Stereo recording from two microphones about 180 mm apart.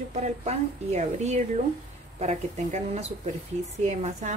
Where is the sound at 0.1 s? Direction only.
35° right (ahead or behind).